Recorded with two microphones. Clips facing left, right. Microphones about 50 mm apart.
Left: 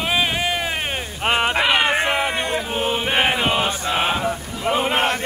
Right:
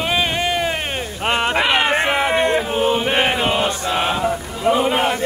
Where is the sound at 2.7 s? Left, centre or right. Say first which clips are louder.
Right 3 dB; centre.